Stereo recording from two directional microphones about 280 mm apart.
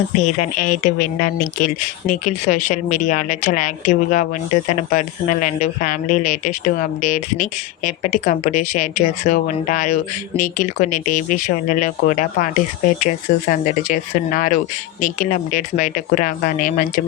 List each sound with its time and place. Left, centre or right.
0.2 s speech: left